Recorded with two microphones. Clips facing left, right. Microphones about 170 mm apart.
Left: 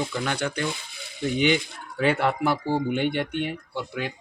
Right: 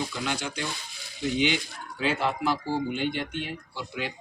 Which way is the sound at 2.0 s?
65° left (ahead or behind).